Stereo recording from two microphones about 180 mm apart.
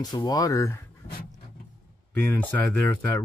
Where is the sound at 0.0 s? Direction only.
20° left (ahead or behind).